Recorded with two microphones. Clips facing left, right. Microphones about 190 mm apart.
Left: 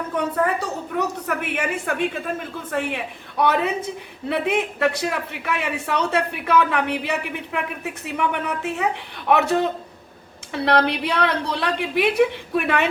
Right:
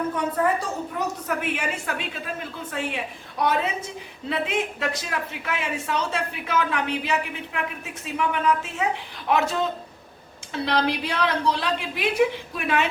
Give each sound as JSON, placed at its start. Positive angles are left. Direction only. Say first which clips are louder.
{"t": 0.4, "sound": "a man's voice", "louder": "even", "side_deg": 65}